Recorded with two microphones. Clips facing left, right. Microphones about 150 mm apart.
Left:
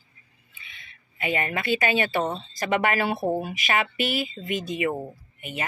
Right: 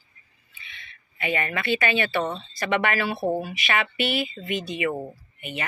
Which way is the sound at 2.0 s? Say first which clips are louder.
Even; 45° left (ahead or behind).